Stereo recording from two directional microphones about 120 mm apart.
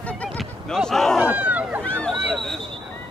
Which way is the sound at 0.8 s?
5° left (ahead or behind).